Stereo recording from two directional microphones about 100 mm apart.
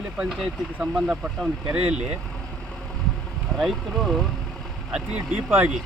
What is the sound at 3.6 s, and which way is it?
Speech, centre (ahead or behind).